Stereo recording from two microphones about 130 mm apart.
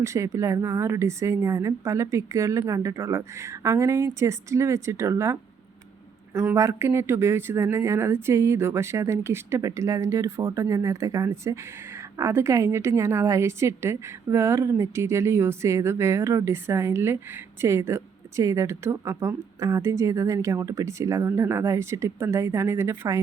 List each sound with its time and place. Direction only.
0.0 s speech: 25° right (ahead or behind)
6.5 s speech: 20° right (ahead or behind)